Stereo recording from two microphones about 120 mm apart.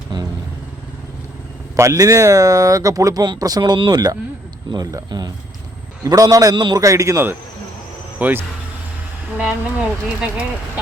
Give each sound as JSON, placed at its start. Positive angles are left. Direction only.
{"t": 0.1, "sound": "vehicle", "side_deg": -40}
{"t": 1.7, "sound": "a man's voice", "side_deg": -25}